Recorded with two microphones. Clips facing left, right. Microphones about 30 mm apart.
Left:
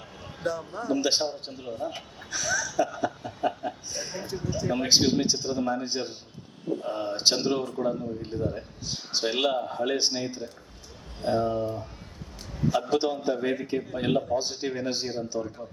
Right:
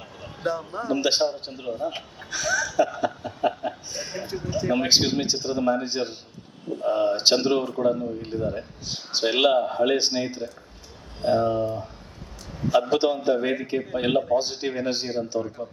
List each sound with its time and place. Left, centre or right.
0.4 s speech: right
12.7 s speech: centre
14.3 s speech: centre